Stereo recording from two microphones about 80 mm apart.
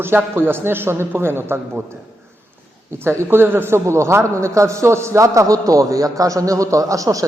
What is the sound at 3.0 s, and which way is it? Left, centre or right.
A man's voice, right.